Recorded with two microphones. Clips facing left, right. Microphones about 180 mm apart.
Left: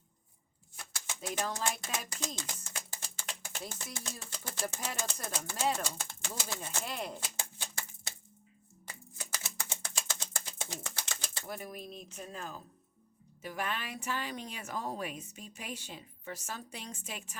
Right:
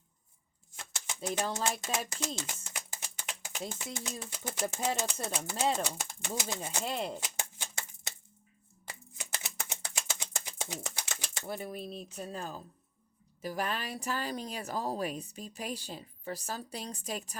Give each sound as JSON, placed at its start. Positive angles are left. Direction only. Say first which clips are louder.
{"t": 0.8, "sound": "bird", "louder": "right 3 dB", "side_deg": -20}
{"t": 1.4, "sound": "speech", "louder": "right 1 dB", "side_deg": -25}
{"t": 2.7, "sound": "speech", "louder": "right 1 dB", "side_deg": -15}
{"t": 6.8, "sound": "speech", "louder": "right 6 dB", "side_deg": -30}
{"t": 7.3, "sound": "a sound", "louder": "right 1 dB", "side_deg": -20}
{"t": 9.1, "sound": "a sound", "louder": "right 1 dB", "side_deg": -20}
{"t": 13.4, "sound": "a woman's voice", "louder": "right 3 dB", "side_deg": -35}